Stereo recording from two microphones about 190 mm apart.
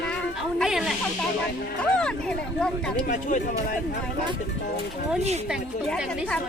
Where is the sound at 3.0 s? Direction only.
40° left (ahead or behind).